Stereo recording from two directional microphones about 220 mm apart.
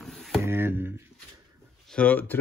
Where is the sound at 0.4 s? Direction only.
10° right (ahead or behind).